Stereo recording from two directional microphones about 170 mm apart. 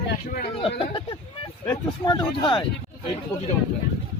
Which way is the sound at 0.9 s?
30° left (ahead or behind).